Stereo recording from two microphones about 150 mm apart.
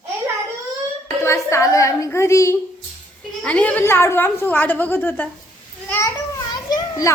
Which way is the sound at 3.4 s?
10° left (ahead or behind).